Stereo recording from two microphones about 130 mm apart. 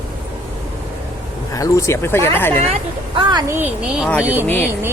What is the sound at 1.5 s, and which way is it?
A woman's voice, 25° left (ahead or behind).